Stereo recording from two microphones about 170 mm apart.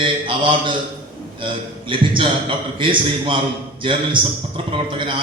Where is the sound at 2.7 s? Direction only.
30° right (ahead or behind).